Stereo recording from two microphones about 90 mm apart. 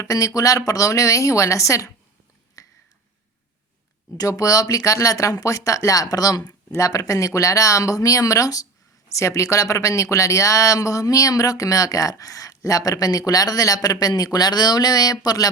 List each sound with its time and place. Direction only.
0.0 s speech: 40° left (ahead or behind)
2.6 s a sound: 40° left (ahead or behind)
4.2 s speech: 40° left (ahead or behind)